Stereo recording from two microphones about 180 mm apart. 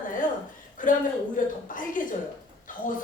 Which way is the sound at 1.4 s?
50° left (ahead or behind).